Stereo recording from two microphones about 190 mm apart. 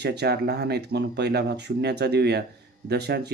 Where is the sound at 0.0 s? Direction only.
60° right (ahead or behind).